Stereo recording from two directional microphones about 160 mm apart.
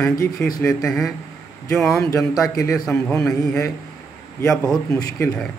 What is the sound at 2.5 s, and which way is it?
Speech, 20° left (ahead or behind).